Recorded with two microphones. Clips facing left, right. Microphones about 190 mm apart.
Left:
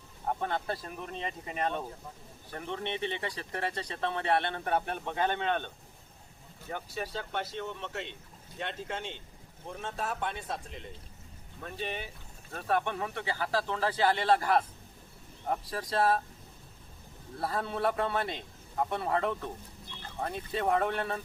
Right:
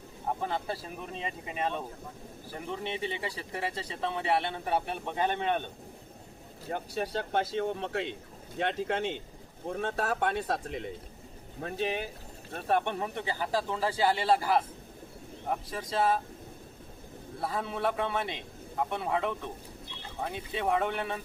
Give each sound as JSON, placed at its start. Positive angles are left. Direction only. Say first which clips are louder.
{"t": 0.3, "sound": "speech", "louder": "even", "side_deg": -5}
{"t": 6.7, "sound": "a man's voice", "louder": "right 4 dB", "side_deg": -45}
{"t": 8.5, "sound": "speech", "louder": "right 7 dB", "side_deg": -75}
{"t": 11.6, "sound": "a man's voice", "louder": "right 6 dB", "side_deg": -45}
{"t": 12.5, "sound": "speech", "louder": "right 2 dB", "side_deg": -25}
{"t": 17.4, "sound": "speech", "louder": "left 1 dB", "side_deg": 0}